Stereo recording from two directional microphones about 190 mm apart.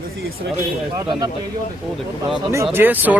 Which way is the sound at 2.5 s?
15° right (ahead or behind).